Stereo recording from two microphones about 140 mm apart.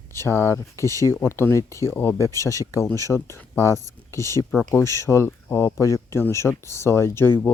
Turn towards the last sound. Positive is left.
turn(degrees=15)  # may be behind; listen again after turning